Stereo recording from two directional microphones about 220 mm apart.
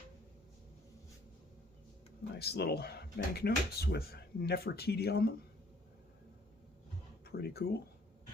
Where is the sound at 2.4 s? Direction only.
45° left (ahead or behind).